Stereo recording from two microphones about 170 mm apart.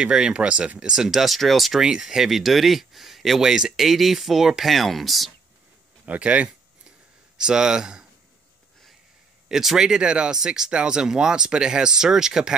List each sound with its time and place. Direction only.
0.0 s speech: 5° right (ahead or behind)
9.5 s speech: centre (ahead or behind)